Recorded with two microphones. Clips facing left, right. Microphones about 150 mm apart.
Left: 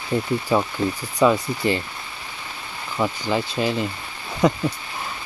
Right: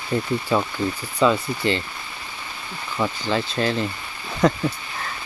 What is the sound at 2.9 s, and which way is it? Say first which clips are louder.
Speech: left 1 dB; 10° left (ahead or behind).